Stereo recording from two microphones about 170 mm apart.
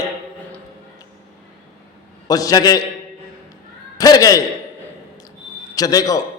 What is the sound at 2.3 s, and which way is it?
Speech, 20° left (ahead or behind).